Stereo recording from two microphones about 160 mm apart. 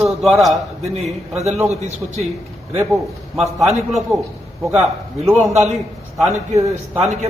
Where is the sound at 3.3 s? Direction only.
Centre (ahead or behind).